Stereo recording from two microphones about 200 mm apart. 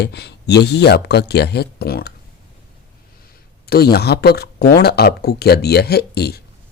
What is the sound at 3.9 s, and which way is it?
Speech, 50° left (ahead or behind).